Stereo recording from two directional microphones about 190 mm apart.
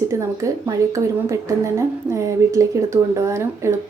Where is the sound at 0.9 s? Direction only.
15° right (ahead or behind).